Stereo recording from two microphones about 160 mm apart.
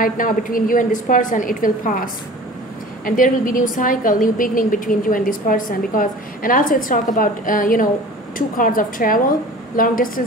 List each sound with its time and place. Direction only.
0.0 s a woman's voice: 60° left (ahead or behind)
3.1 s a woman's voice: 60° left (ahead or behind)